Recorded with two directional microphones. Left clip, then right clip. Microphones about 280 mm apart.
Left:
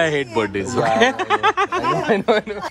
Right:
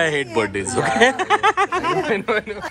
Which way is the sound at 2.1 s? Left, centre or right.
Left.